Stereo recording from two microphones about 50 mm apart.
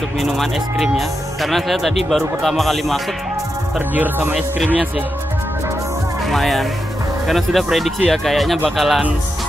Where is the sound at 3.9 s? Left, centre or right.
Right.